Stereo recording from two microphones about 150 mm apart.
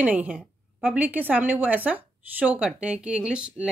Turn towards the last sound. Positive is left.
turn(degrees=-5)  # may be behind; listen again after turning